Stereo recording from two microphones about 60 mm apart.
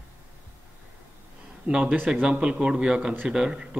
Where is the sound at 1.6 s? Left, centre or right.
Centre.